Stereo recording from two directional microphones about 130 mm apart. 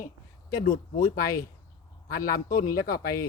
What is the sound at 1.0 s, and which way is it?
Speech, 90° left.